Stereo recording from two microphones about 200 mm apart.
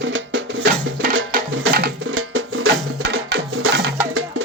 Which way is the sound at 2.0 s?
90° right.